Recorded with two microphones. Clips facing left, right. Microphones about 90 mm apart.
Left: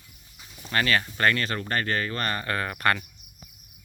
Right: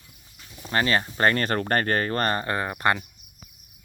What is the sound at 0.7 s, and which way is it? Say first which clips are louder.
Speech: right 2 dB; 25° right (ahead or behind).